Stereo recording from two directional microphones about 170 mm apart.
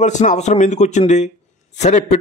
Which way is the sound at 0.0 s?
45° left (ahead or behind).